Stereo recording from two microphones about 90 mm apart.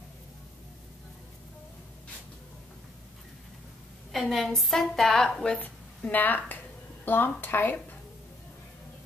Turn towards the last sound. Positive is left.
turn(degrees=20)  # may be behind; listen again after turning